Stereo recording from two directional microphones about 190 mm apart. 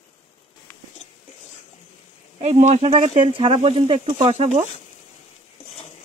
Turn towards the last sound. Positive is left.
turn(degrees=-35)  # may be behind; listen again after turning